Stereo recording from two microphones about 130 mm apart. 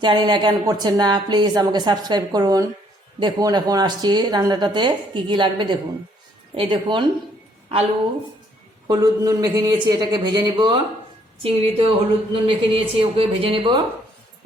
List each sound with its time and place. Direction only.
0.0 s a woman's voice: 35° right (ahead or behind)
8.9 s a woman's voice: 30° right (ahead or behind)
11.4 s a woman's voice: 45° right (ahead or behind)